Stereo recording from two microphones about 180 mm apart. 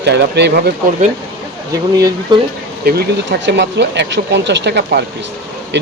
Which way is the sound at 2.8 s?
60° right (ahead or behind).